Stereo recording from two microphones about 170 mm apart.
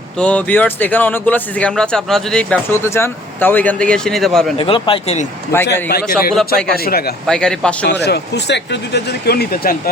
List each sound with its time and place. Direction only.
0.2 s speech: 5° left (ahead or behind)
4.5 s a man's voice: 30° left (ahead or behind)
5.6 s speech: 75° left (ahead or behind)
7.3 s speech: 5° left (ahead or behind)
7.9 s speech: 75° left (ahead or behind)